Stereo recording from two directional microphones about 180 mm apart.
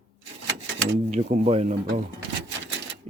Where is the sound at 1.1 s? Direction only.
40° right (ahead or behind).